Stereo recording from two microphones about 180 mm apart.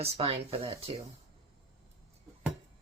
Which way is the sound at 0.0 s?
35° right (ahead or behind).